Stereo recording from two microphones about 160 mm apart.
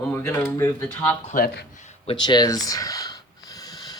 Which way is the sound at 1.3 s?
75° left (ahead or behind).